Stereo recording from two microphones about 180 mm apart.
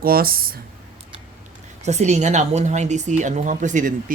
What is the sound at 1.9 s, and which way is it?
Speech, 40° right (ahead or behind).